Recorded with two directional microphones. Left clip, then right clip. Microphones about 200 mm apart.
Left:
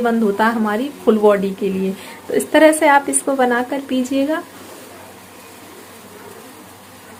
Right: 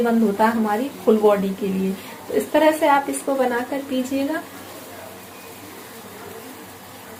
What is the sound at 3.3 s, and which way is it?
A woman's voice, 65° left (ahead or behind).